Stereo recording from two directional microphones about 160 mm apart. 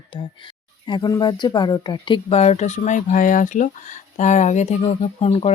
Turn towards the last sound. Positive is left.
turn(degrees=40)  # may be behind; listen again after turning